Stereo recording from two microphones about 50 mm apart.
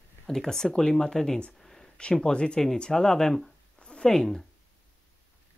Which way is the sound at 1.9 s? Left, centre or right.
Centre.